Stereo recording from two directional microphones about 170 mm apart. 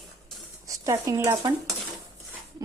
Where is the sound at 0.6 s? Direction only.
20° right (ahead or behind).